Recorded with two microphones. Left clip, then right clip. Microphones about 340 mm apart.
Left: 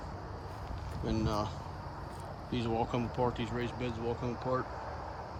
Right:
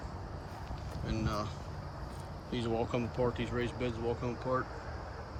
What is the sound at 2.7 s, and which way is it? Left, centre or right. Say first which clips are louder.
Speech: left 1 dB; centre.